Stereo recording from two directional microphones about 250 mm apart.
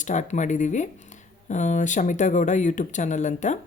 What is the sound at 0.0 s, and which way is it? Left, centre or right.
Speech, left.